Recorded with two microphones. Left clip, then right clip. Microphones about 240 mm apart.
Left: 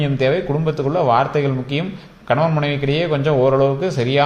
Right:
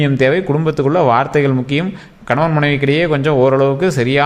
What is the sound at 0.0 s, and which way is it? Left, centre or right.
A man's voice, right.